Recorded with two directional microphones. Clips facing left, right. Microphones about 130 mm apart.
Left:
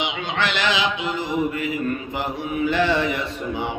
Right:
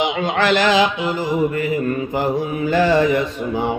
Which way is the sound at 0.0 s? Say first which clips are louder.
Right 6 dB; 40° right (ahead or behind).